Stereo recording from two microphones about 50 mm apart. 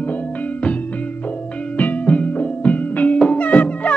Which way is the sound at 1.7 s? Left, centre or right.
Left.